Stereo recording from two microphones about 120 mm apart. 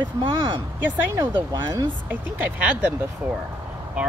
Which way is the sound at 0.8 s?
15° right (ahead or behind).